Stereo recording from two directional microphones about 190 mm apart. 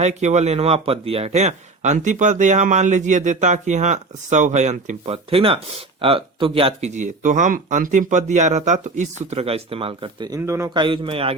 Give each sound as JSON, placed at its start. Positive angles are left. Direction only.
{"t": 0.0, "sound": "a man's voice", "side_deg": -35}
{"t": 10.8, "sound": "a man's voice", "side_deg": -25}